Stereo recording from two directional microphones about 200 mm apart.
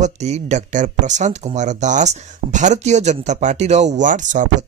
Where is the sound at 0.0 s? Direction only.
35° right (ahead or behind).